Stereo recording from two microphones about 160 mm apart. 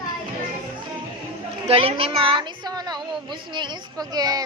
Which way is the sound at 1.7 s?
35° right (ahead or behind).